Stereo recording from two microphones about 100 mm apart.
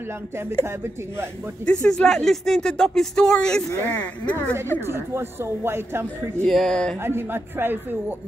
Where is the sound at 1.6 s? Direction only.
5° left (ahead or behind).